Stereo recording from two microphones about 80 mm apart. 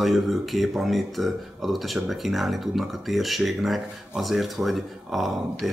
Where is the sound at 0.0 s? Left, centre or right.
Centre.